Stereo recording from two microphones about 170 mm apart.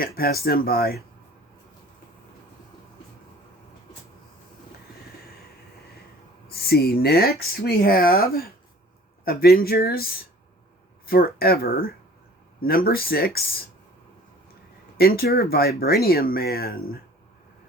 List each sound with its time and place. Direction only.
0.0 s speech: 60° left (ahead or behind)
6.5 s speech: 65° left (ahead or behind)
14.9 s speech: 65° left (ahead or behind)